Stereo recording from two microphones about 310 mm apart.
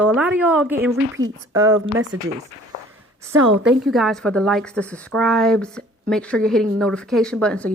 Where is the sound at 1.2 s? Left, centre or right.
Right.